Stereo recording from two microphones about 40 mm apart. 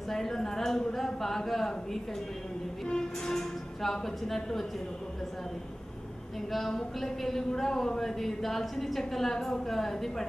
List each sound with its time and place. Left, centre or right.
0.1 s a woman's voice: centre
3.3 s a woman's voice: centre
6.7 s a woman's voice: centre